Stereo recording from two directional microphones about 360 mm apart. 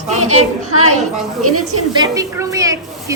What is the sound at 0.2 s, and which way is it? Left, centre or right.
A woman's voice, right.